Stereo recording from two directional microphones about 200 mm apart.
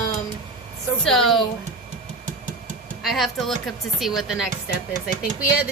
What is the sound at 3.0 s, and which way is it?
A woman's voice, centre (ahead or behind).